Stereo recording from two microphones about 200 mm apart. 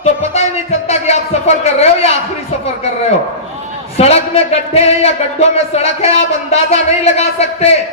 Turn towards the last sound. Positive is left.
turn(degrees=30)  # may be behind; listen again after turning